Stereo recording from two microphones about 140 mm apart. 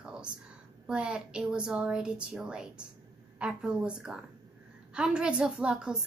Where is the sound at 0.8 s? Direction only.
5° right (ahead or behind).